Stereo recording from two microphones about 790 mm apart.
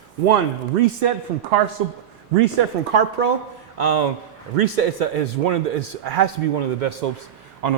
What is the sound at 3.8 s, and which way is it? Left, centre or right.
A man's voice, right.